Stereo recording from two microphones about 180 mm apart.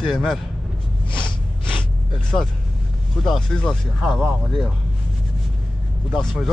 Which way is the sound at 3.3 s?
Centre (ahead or behind).